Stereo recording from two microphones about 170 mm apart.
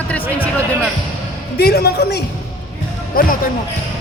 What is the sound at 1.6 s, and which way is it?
A woman's voice, 65° left (ahead or behind).